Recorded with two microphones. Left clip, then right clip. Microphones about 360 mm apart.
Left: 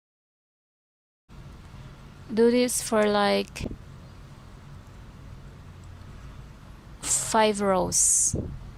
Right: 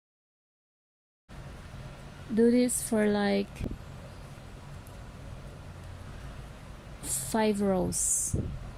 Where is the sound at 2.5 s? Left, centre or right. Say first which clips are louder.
Left 3 dB; centre.